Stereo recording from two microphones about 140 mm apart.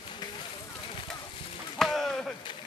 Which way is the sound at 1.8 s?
Centre (ahead or behind).